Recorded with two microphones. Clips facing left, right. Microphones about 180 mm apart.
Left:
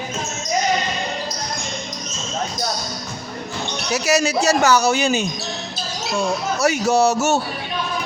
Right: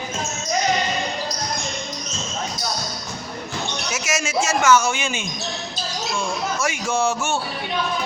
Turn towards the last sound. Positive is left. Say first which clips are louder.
# left 5 dB
turn(degrees=40)  # may be behind; listen again after turning